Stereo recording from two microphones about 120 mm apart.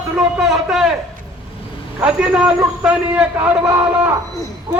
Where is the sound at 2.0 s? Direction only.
5° right (ahead or behind).